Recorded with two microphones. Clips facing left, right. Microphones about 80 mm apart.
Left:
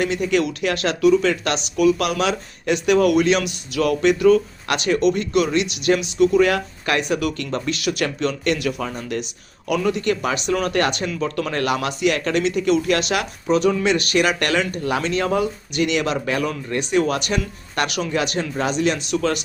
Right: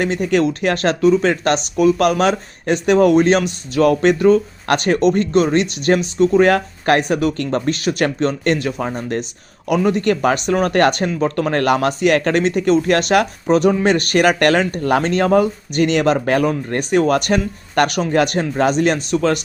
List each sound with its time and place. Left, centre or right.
0.0 s speech: right